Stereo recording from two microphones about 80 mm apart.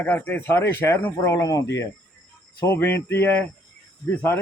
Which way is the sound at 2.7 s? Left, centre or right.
Left.